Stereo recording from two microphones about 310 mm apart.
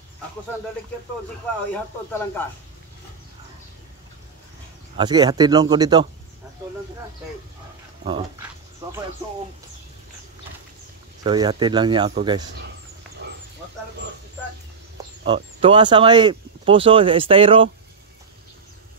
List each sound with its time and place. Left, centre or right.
1.7 s speech: centre
4.9 s speech: centre
11.2 s speech: centre
15.2 s speech: centre